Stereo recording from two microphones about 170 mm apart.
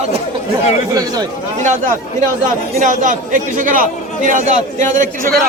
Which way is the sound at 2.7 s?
50° right (ahead or behind).